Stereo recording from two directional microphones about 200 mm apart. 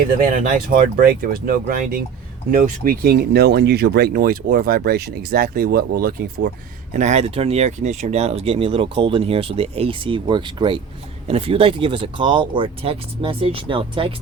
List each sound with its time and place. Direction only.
0.2 s speech: 45° right (ahead or behind)
6.9 s speech: 35° right (ahead or behind)